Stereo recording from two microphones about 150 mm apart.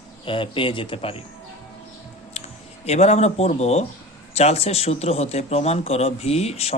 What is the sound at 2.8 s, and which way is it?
Speech, 45° left (ahead or behind).